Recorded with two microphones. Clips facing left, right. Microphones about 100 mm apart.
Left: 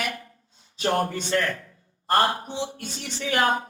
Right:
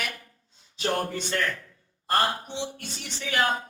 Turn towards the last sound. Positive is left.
turn(degrees=35)  # may be behind; listen again after turning